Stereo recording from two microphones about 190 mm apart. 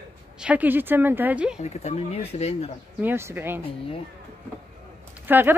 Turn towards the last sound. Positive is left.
turn(degrees=-10)  # may be behind; listen again after turning